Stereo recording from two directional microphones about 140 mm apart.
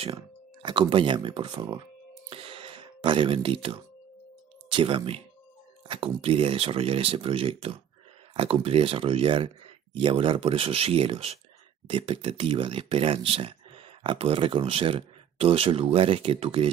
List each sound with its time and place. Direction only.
0.0 s speech: 40° right (ahead or behind)
2.2 s a sound: 40° right (ahead or behind)
4.7 s speech: 40° right (ahead or behind)